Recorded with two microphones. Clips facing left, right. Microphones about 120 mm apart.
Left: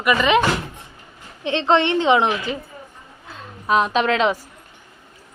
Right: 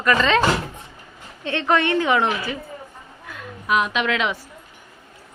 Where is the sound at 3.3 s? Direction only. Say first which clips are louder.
Left 2 dB; 30° left (ahead or behind).